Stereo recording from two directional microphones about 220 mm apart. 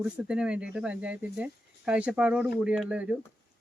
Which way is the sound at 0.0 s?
5° right (ahead or behind).